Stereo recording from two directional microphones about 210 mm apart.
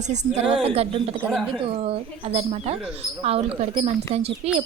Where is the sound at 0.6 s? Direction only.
30° right (ahead or behind).